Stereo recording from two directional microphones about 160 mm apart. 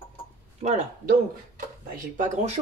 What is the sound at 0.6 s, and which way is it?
Speech, 45° right (ahead or behind).